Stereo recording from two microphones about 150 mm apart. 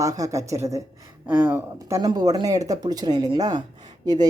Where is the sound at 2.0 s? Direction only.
25° right (ahead or behind).